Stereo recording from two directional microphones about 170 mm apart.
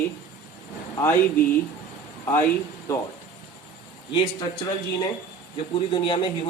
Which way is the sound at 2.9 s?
20° left (ahead or behind).